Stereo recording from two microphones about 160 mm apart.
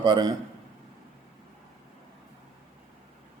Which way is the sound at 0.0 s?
30° right (ahead or behind).